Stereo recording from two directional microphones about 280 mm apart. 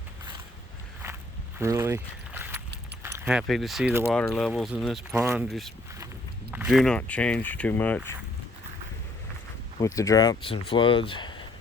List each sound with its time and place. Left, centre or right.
1.5 s speech: centre
9.8 s speech: centre